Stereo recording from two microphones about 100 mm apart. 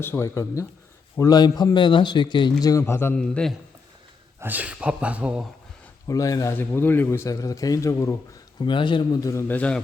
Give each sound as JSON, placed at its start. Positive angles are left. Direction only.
{"t": 0.0, "sound": "speech", "side_deg": 25}
{"t": 1.2, "sound": "a man's voice", "side_deg": 40}
{"t": 2.8, "sound": "speech", "side_deg": 25}
{"t": 3.2, "sound": "a man's voice", "side_deg": 5}
{"t": 4.4, "sound": "speech", "side_deg": -20}
{"t": 6.1, "sound": "a man's voice", "side_deg": 35}
{"t": 6.5, "sound": "a man's voice", "side_deg": 20}
{"t": 8.6, "sound": "a man's voice", "side_deg": 55}
{"t": 9.2, "sound": "speech", "side_deg": 30}
{"t": 9.5, "sound": "a man's voice", "side_deg": 15}